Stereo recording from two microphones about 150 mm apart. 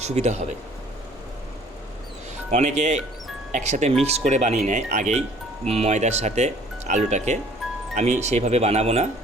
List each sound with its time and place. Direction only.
0.0 s speech: 45° right (ahead or behind)
2.5 s speech: 50° right (ahead or behind)
7.6 s music: centre (ahead or behind)
7.9 s speech: 55° right (ahead or behind)